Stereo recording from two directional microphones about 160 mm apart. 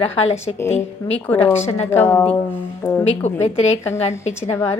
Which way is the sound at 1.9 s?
15° left (ahead or behind).